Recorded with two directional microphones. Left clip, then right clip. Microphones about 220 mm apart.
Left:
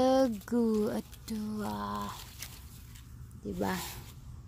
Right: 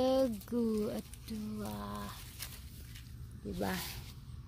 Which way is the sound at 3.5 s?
20° left (ahead or behind).